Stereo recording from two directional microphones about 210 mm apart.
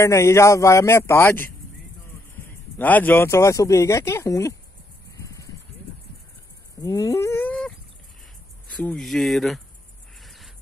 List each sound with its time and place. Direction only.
0.0 s speech: 15° left (ahead or behind)
2.8 s speech: 10° left (ahead or behind)
5.1 s a sound: 15° left (ahead or behind)
6.8 s dog: 15° left (ahead or behind)
8.7 s speech: 5° left (ahead or behind)
10.2 s a sound: centre (ahead or behind)